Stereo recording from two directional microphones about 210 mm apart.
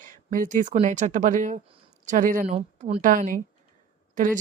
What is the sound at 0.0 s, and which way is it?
Speech, 40° right (ahead or behind).